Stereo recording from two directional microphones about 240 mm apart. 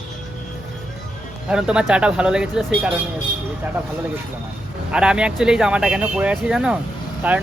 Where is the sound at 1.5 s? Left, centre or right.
Centre.